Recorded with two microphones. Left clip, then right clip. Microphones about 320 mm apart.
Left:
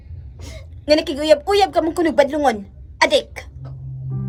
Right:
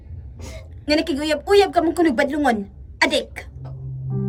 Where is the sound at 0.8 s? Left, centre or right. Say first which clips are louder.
Left 4 dB; centre.